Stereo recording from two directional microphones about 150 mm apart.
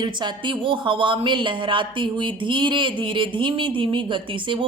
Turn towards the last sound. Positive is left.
turn(degrees=-35)  # may be behind; listen again after turning